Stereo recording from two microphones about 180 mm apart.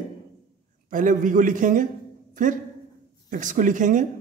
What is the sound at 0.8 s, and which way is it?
A man's voice, 45° right (ahead or behind).